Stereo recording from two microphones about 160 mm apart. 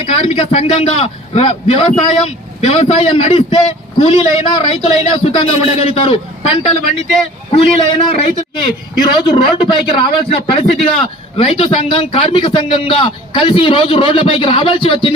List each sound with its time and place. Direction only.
0.0 s a man's voice: 40° left (ahead or behind)
7.5 s a man's voice: 35° left (ahead or behind)